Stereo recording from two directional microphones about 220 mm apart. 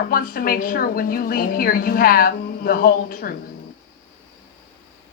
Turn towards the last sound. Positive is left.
turn(degrees=40)  # may be behind; listen again after turning